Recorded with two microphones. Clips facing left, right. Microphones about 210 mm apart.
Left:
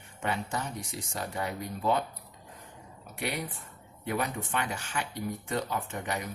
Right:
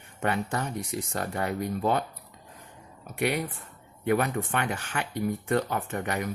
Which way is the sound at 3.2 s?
60° right (ahead or behind).